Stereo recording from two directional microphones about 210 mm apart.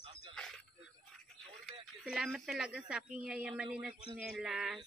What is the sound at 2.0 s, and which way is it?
Speech, centre (ahead or behind).